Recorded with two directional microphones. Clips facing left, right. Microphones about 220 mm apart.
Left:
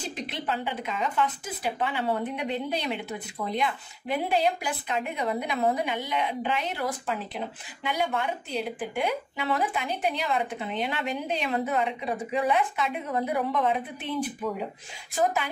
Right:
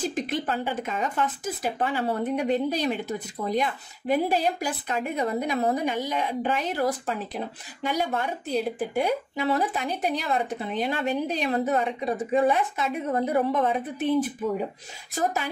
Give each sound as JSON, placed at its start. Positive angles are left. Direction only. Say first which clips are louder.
{"t": 0.0, "sound": "a woman's voice", "louder": "right 6 dB", "side_deg": -45}